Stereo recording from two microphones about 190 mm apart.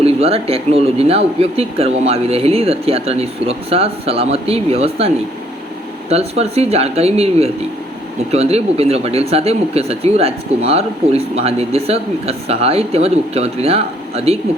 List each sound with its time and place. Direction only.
0.0 s speech: 30° right (ahead or behind)